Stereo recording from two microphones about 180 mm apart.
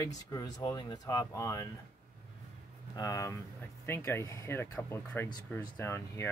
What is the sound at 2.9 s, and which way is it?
Speech, 20° left (ahead or behind).